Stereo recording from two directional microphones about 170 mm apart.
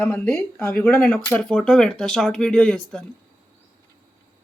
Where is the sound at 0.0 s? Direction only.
15° left (ahead or behind).